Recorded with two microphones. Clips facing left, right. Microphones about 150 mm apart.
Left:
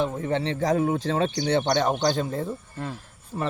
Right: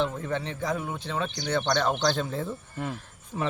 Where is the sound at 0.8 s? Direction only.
40° left (ahead or behind).